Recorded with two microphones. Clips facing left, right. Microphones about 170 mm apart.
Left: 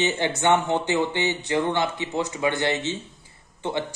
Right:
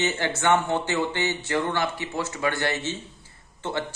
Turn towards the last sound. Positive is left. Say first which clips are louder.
# left 2 dB
turn(degrees=15)  # may be behind; listen again after turning